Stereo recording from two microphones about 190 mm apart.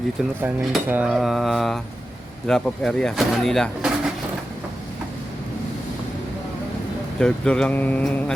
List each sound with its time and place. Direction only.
0.4 s speech: 10° right (ahead or behind)
7.2 s speech: 5° left (ahead or behind)